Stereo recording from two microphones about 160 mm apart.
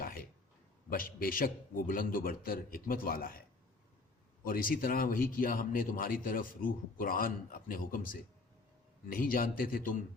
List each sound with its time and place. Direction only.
0.0 s a sound: 65° left (ahead or behind)
0.9 s speech: 65° left (ahead or behind)
4.4 s speech: 60° left (ahead or behind)